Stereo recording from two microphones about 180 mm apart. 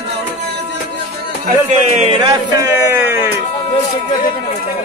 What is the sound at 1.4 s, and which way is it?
Speech, 40° right (ahead or behind).